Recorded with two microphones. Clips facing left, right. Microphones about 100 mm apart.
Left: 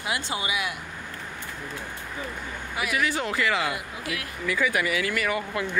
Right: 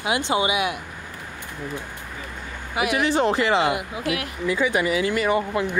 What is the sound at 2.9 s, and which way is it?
Speech, 30° right (ahead or behind).